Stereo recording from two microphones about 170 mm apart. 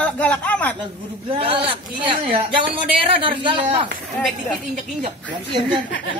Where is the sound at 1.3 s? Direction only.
35° right (ahead or behind).